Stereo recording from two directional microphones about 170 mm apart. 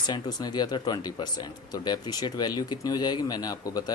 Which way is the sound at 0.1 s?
25° left (ahead or behind).